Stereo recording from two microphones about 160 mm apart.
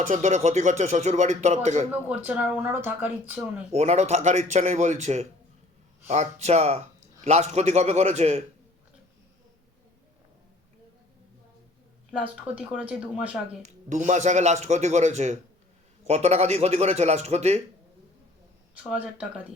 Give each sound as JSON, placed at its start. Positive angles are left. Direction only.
{"t": 0.1, "sound": "a man's voice", "side_deg": -45}
{"t": 1.9, "sound": "speech", "side_deg": -10}
{"t": 3.7, "sound": "a man's voice", "side_deg": -45}
{"t": 12.2, "sound": "speech", "side_deg": -10}
{"t": 13.6, "sound": "a man's voice", "side_deg": -50}
{"t": 18.7, "sound": "speech", "side_deg": -5}